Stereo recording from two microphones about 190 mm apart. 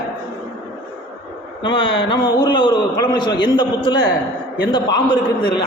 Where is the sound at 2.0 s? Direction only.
25° left (ahead or behind).